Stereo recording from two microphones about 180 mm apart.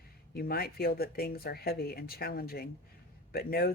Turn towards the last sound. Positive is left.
turn(degrees=55)  # may be behind; listen again after turning